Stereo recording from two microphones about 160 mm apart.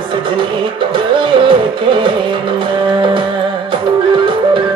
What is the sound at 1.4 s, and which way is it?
Music, 30° right (ahead or behind).